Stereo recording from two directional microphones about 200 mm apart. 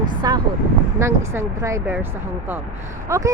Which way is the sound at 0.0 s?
20° right (ahead or behind).